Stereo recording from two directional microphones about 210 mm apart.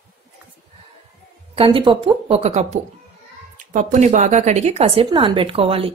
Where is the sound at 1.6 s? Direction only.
25° right (ahead or behind).